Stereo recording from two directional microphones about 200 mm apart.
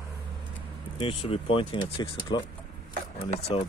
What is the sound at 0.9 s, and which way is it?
Speech, 30° left (ahead or behind).